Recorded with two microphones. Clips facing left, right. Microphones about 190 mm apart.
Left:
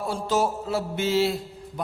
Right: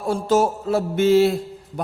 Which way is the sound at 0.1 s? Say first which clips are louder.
Right 7 dB; 45° right (ahead or behind).